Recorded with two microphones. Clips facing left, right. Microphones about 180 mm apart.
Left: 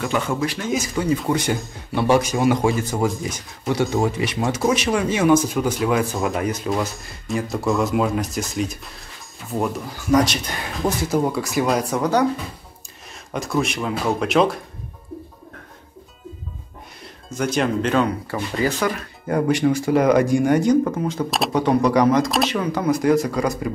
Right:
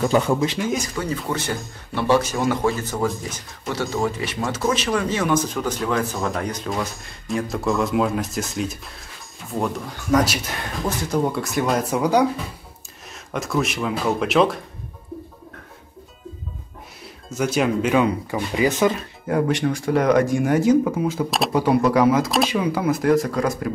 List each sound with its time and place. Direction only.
0.0 s speech: 35° right (ahead or behind)
0.6 s speech: centre (ahead or behind)
1.3 s speech: 15° left (ahead or behind); by 14.6 s centre (ahead or behind)
17.0 s speech: 5° right (ahead or behind)
19.2 s speech: centre (ahead or behind)